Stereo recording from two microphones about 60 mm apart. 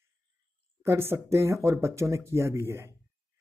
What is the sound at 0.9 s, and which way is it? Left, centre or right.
Speech, right.